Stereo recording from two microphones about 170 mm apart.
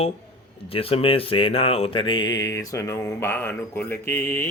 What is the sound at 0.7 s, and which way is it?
Speech, 35° left (ahead or behind).